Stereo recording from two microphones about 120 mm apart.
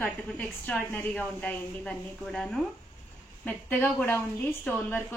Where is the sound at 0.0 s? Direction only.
15° left (ahead or behind).